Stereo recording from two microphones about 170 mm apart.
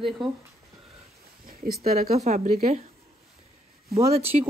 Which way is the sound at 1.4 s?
60° right (ahead or behind).